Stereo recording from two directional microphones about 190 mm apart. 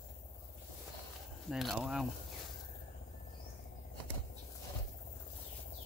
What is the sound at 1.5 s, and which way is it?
Speech, centre (ahead or behind).